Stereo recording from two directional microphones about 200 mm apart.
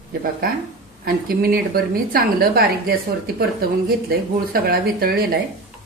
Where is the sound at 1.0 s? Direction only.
50° right (ahead or behind).